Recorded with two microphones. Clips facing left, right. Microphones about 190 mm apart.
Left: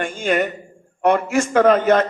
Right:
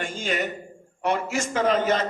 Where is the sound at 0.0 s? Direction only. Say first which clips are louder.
Left 7 dB; 55° left (ahead or behind).